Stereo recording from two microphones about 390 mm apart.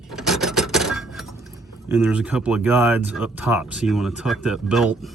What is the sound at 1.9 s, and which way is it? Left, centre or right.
Speech, centre.